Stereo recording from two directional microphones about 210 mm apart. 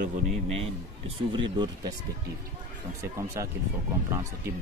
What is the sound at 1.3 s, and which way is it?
Speech, 20° right (ahead or behind).